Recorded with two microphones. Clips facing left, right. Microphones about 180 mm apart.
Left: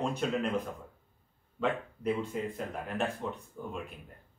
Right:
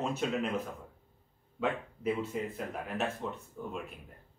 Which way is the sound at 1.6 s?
5° right (ahead or behind).